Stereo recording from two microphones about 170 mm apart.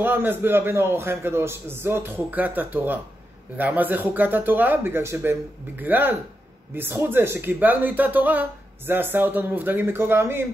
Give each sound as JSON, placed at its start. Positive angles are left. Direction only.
{"t": 0.0, "sound": "speech", "side_deg": -10}